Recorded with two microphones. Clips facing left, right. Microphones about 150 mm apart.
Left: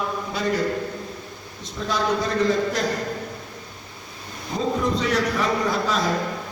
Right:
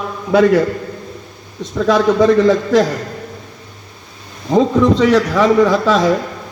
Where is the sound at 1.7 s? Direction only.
90° right.